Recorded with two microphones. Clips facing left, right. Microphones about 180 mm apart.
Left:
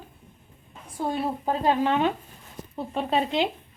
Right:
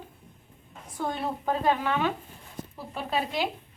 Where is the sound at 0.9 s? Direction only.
30° left (ahead or behind).